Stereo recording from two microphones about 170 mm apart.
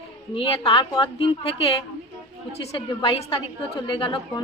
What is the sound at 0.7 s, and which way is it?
A woman's voice, 30° left (ahead or behind).